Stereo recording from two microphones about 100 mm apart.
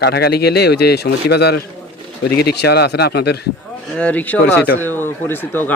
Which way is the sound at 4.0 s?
15° left (ahead or behind).